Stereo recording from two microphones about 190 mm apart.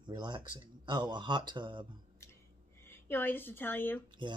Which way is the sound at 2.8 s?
10° left (ahead or behind).